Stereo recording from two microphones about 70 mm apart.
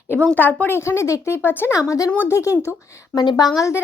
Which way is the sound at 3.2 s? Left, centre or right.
Left.